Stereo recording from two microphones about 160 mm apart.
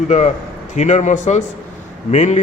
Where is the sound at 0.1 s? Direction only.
50° left (ahead or behind).